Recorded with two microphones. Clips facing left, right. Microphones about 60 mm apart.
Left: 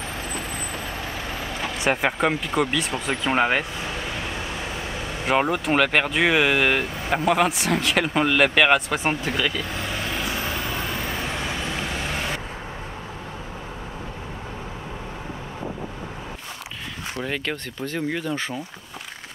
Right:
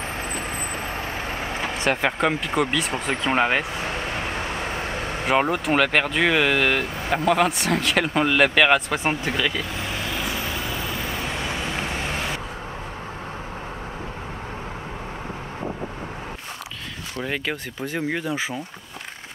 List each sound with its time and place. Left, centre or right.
1.4 s vehicle: right
1.9 s speech: centre
3.8 s vehicle: right
5.2 s speech: centre
10.1 s vehicle: centre
17.2 s speech: centre